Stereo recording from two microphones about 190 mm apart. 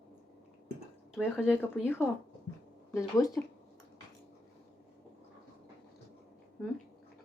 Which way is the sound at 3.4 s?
10° left (ahead or behind).